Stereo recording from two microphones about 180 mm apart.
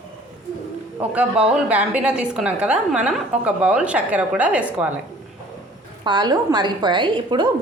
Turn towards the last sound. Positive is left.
turn(degrees=-25)  # may be behind; listen again after turning